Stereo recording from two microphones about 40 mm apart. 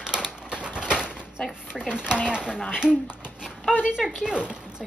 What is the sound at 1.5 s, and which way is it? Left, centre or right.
Speech, right.